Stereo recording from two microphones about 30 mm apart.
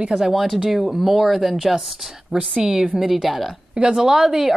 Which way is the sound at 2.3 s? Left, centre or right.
Centre.